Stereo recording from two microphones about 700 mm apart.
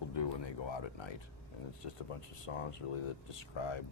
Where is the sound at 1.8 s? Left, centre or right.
Left.